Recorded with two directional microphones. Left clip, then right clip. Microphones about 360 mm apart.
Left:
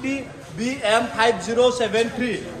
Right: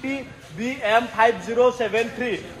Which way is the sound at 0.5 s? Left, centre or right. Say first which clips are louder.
Even; centre.